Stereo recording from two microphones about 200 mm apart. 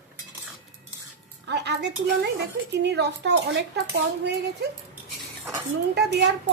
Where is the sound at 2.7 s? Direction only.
60° right (ahead or behind).